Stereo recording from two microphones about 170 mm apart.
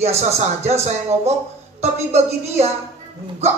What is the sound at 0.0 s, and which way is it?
A woman's voice, 40° right (ahead or behind).